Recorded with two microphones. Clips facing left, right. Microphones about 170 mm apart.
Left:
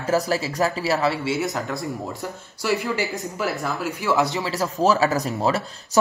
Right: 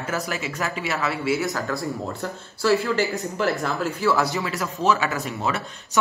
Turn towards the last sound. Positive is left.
turn(degrees=35)  # may be behind; listen again after turning